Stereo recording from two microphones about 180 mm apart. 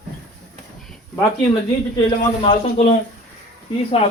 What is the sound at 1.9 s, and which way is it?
Speech, 30° left (ahead or behind).